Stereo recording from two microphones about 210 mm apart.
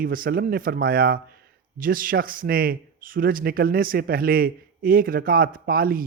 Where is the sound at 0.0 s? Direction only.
45° right (ahead or behind).